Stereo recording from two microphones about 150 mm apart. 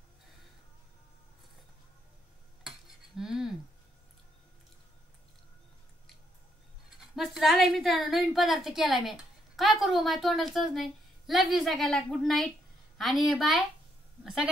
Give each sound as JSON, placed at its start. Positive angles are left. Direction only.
{"t": 2.6, "sound": "cutlery", "side_deg": -5}
{"t": 7.0, "sound": "a woman's voice", "side_deg": 0}